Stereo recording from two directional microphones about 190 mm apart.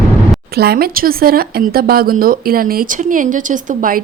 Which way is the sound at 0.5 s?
55° right (ahead or behind).